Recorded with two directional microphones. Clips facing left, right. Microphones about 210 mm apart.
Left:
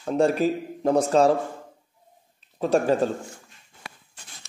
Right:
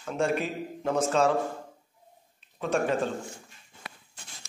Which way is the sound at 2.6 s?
35° left (ahead or behind).